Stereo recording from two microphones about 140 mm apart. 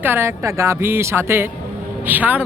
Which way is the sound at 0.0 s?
15° right (ahead or behind).